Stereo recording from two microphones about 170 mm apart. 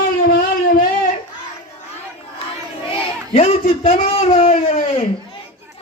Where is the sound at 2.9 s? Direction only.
35° left (ahead or behind).